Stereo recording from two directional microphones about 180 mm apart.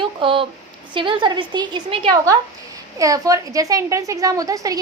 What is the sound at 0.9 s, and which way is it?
A woman's voice, 25° right (ahead or behind).